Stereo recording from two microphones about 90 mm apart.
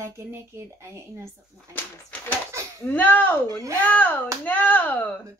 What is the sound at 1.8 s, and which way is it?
Speech, 20° left (ahead or behind).